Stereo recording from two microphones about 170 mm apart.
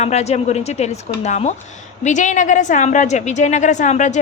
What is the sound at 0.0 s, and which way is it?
A woman's voice, 40° left (ahead or behind).